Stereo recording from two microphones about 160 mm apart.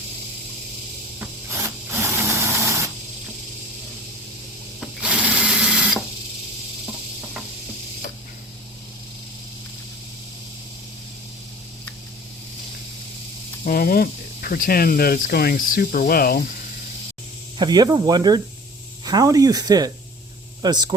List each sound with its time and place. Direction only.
1.2 s sewing machine: 15° right (ahead or behind)
4.8 s sewing machine: 5° right (ahead or behind)
13.7 s speech: 65° left (ahead or behind)
17.6 s speech: 25° right (ahead or behind)
20.6 s a sound: 25° right (ahead or behind)